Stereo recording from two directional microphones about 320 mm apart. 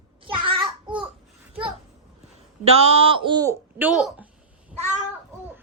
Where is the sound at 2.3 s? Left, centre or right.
Centre.